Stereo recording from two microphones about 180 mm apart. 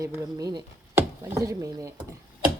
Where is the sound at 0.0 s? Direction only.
15° right (ahead or behind).